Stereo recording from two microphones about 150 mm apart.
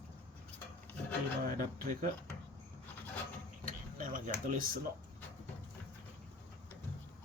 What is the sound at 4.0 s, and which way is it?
Speech, 60° right (ahead or behind).